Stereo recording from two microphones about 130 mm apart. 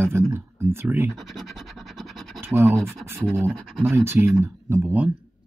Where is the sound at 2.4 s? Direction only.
20° right (ahead or behind).